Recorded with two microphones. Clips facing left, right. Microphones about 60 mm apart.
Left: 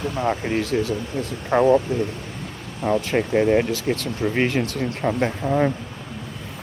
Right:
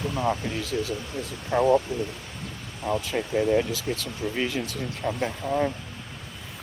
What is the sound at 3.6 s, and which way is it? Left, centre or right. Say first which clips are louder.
Speech: left 6 dB; left.